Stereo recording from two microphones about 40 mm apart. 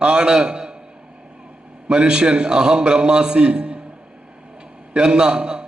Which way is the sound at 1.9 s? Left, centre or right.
Right.